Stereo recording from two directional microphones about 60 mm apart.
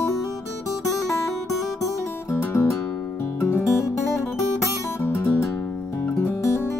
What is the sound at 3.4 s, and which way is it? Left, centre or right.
Music, left.